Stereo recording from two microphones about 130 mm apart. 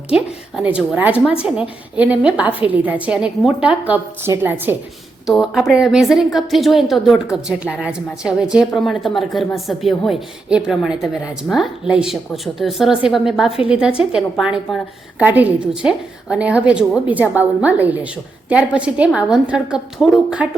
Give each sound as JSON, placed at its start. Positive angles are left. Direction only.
{"t": 0.1, "sound": "a woman's voice", "side_deg": -10}
{"t": 5.2, "sound": "a woman's voice", "side_deg": 0}